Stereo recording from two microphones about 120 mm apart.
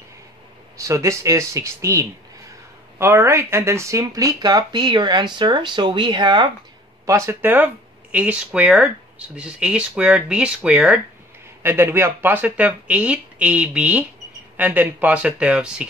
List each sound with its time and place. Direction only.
0.7 s speech: 25° right (ahead or behind)
7.1 s speech: 20° right (ahead or behind)
11.6 s speech: 20° right (ahead or behind)